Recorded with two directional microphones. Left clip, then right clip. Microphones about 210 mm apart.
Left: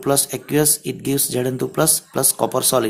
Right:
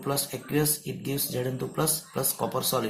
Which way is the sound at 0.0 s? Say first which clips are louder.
Left 10 dB; 50° left (ahead or behind).